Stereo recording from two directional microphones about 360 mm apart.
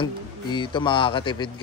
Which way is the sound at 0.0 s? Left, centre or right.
Centre.